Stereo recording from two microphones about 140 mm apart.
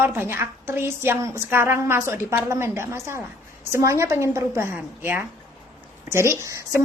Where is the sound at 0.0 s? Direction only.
15° right (ahead or behind).